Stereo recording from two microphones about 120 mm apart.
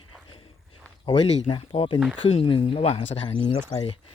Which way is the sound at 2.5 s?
50° left (ahead or behind).